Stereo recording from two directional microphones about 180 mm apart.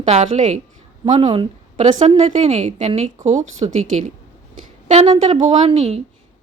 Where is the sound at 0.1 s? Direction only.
40° right (ahead or behind).